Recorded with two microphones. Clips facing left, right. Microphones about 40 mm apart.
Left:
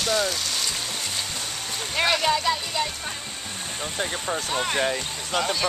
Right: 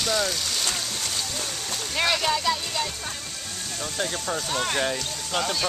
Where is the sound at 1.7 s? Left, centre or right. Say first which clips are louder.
Left 2 dB; centre.